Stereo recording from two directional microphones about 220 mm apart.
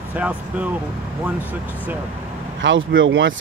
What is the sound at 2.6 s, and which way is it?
Speech, 55° right (ahead or behind).